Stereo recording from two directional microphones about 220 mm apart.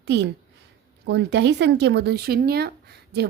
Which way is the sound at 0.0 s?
50° right (ahead or behind).